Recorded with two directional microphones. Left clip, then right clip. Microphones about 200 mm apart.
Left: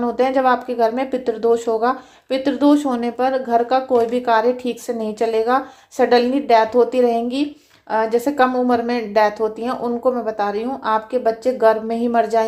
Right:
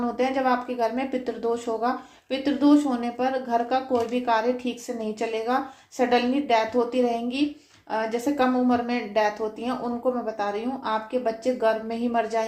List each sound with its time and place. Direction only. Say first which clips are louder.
0.2 s speech: left 8 dB; 45° left (ahead or behind)